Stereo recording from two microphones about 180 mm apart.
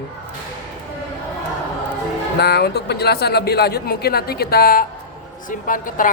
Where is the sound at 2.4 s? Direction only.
65° left (ahead or behind).